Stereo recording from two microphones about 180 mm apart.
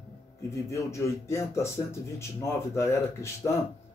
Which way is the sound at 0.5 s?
15° left (ahead or behind).